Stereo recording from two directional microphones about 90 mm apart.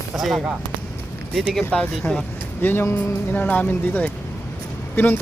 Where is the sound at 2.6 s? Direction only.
25° left (ahead or behind).